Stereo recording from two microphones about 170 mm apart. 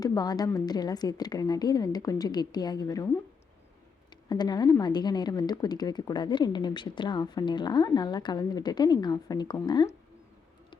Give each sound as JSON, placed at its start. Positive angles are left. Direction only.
{"t": 0.0, "sound": "speech", "side_deg": 20}
{"t": 4.1, "sound": "speech", "side_deg": 25}